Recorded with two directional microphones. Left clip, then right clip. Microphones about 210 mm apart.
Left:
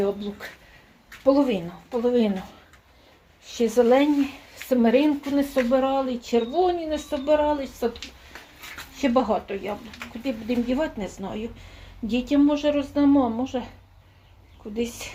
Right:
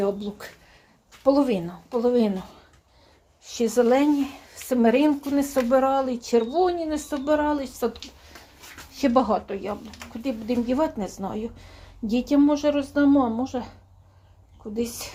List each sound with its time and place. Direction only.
0.0 s speech: 10° right (ahead or behind)
3.4 s speech: 35° right (ahead or behind)
3.7 s speech: 10° right (ahead or behind)
9.0 s speech: 10° right (ahead or behind)